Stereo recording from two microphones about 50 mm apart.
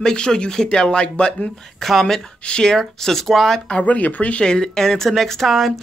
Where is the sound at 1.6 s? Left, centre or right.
Centre.